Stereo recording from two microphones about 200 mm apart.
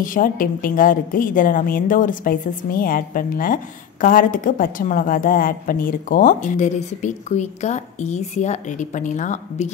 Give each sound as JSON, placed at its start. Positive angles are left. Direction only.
{"t": 0.0, "sound": "a woman's voice", "side_deg": 45}